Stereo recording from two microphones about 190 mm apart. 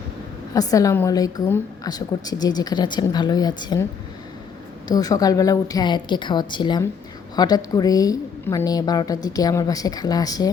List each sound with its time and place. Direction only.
0.5 s a woman's voice: 20° left (ahead or behind)
4.9 s a woman's voice: 20° left (ahead or behind)